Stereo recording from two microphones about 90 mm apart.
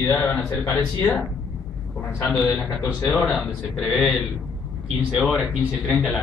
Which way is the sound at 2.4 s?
25° left (ahead or behind).